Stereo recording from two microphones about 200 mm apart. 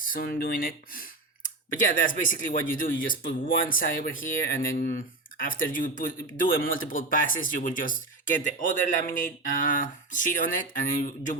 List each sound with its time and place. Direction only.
0.0 s speech: 45° left (ahead or behind)